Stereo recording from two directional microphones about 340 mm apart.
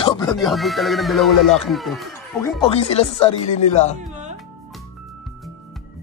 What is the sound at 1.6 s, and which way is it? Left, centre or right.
Speech, centre.